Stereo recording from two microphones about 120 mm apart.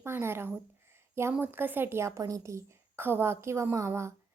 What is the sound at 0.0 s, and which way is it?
A woman's voice, 20° right (ahead or behind).